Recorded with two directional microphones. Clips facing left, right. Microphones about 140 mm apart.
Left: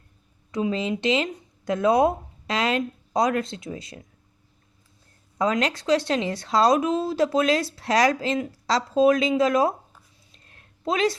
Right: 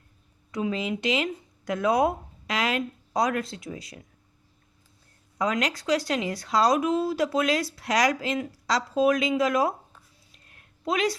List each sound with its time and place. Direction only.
0.5 s speech: 25° left (ahead or behind)
5.4 s speech: 25° left (ahead or behind)
10.3 s a sound: 30° left (ahead or behind)